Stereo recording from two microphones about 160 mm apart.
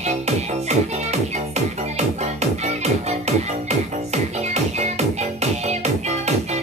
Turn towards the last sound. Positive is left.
turn(degrees=-45)  # may be behind; listen again after turning